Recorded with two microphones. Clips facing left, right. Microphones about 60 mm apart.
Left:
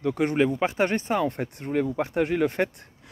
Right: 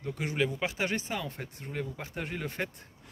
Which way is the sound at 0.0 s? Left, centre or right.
Left.